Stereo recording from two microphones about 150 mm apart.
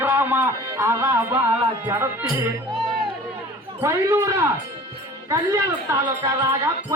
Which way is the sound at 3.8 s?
20° right (ahead or behind).